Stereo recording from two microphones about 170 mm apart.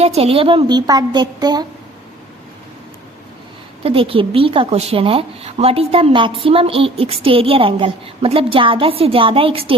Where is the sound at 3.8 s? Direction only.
35° right (ahead or behind).